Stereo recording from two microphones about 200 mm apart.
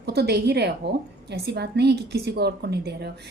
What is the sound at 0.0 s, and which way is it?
A woman's voice, 55° right (ahead or behind).